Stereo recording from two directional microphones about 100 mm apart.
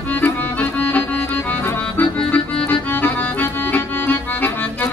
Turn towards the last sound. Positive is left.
turn(degrees=20)  # may be behind; listen again after turning